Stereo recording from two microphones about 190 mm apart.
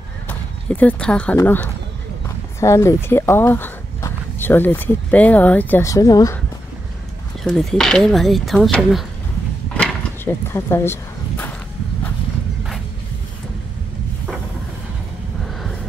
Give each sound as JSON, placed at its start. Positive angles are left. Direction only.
{"t": 0.3, "sound": "speech", "side_deg": 10}
{"t": 7.4, "sound": "speech", "side_deg": 5}
{"t": 9.8, "sound": "a sound", "side_deg": 10}